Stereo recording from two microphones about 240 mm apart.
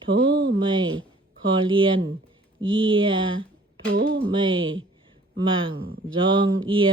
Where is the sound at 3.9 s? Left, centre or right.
Right.